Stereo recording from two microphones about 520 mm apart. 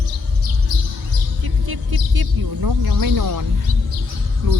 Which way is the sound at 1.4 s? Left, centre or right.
Right.